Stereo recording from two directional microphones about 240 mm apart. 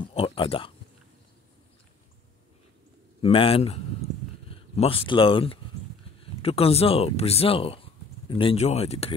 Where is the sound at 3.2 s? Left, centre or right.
Left.